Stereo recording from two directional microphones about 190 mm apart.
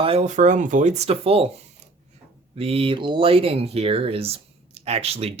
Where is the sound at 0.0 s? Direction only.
35° right (ahead or behind).